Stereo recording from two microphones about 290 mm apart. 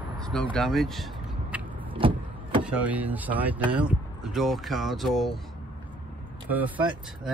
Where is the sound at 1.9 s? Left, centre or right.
Centre.